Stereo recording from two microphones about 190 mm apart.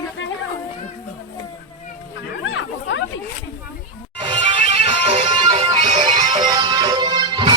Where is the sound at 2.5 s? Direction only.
80° left.